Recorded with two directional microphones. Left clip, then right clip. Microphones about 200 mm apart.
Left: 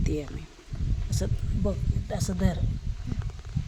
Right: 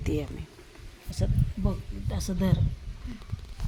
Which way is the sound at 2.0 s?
15° left (ahead or behind).